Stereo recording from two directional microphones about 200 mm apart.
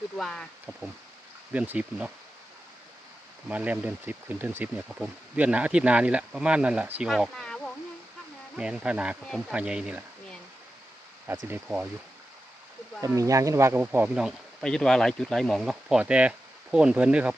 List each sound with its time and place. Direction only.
0.2 s speech: centre (ahead or behind)
1.5 s speech: 10° right (ahead or behind)
3.5 s speech: 10° right (ahead or behind)
11.4 s speech: 10° right (ahead or behind)
13.1 s speech: 15° right (ahead or behind)